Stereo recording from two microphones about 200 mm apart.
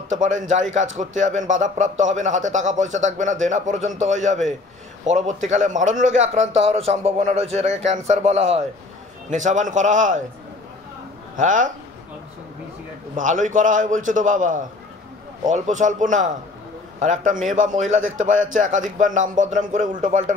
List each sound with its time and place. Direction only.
0.1 s speech: 40° right (ahead or behind)
11.3 s speech: 40° right (ahead or behind)
13.1 s speech: 40° right (ahead or behind)